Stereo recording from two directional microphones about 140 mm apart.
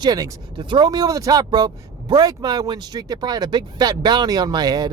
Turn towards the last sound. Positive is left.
turn(degrees=-30)  # may be behind; listen again after turning